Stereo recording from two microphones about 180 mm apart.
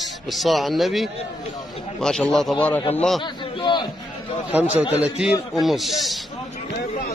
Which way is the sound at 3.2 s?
25° left (ahead or behind).